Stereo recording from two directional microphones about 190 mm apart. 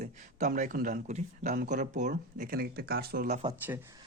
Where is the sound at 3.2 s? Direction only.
35° right (ahead or behind).